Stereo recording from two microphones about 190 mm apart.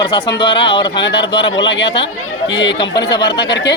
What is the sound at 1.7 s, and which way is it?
Speech, 65° left (ahead or behind).